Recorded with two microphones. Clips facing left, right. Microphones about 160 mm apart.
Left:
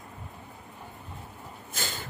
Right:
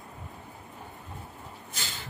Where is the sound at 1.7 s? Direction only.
50° left (ahead or behind).